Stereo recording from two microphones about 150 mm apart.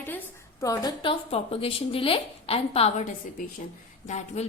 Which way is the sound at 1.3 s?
40° left (ahead or behind).